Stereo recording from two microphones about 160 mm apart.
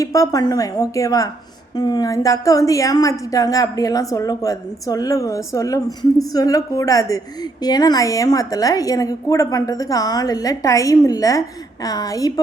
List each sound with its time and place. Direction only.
0.0 s a woman's voice: 20° left (ahead or behind)